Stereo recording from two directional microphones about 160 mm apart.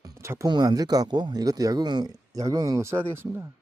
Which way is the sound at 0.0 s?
20° right (ahead or behind).